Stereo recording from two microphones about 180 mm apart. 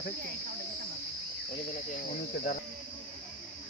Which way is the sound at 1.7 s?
45° left (ahead or behind).